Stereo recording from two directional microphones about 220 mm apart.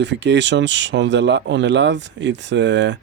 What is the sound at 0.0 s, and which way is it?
Speech, 55° right (ahead or behind).